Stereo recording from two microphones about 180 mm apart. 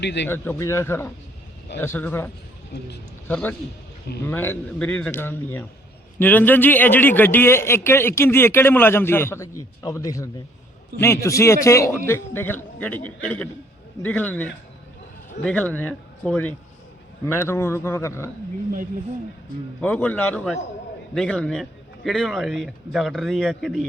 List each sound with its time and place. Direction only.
0.0 s speech: 75° left (ahead or behind)
0.3 s a man's voice: 15° left (ahead or behind)
19.8 s a man's voice: 10° left (ahead or behind)